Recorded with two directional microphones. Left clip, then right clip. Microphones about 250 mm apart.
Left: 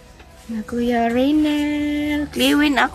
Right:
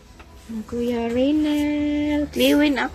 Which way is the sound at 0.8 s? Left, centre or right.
Centre.